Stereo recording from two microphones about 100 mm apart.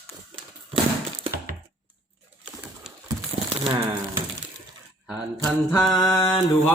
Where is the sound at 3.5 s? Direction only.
75° right (ahead or behind).